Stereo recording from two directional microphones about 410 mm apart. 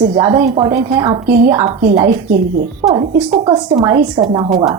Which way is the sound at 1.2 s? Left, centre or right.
Right.